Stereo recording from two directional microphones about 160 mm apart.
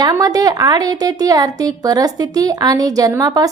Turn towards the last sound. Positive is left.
turn(degrees=-25)  # may be behind; listen again after turning